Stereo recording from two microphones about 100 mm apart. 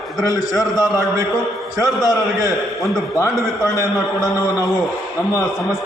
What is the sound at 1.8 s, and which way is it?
Speech, 35° left (ahead or behind).